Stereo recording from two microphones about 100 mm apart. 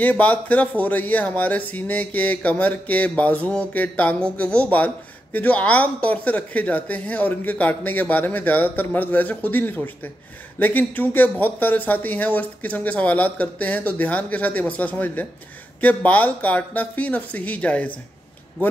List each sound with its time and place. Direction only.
0.0 s speech: 15° left (ahead or behind)